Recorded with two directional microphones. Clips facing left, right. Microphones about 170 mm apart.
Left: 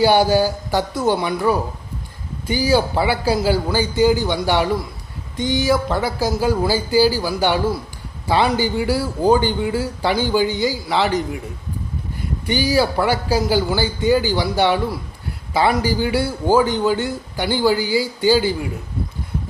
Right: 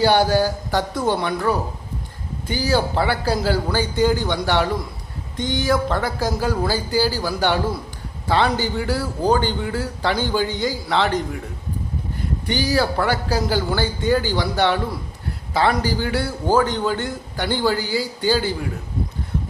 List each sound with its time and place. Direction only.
0.0 s a man's voice: 10° left (ahead or behind)
12.5 s a man's voice: 10° left (ahead or behind)